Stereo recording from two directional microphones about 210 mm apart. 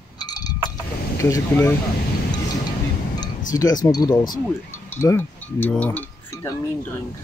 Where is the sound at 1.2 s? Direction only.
10° left (ahead or behind).